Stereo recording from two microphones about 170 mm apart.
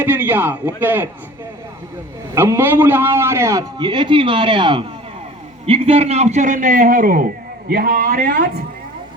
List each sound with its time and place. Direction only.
0.0 s a man's voice: 10° right (ahead or behind)
2.3 s a man's voice: 15° right (ahead or behind)
3.8 s a man's voice: 25° right (ahead or behind); by 8.4 s 55° right (ahead or behind)